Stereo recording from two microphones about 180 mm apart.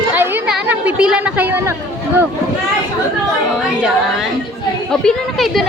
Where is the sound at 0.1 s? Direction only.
5° right (ahead or behind).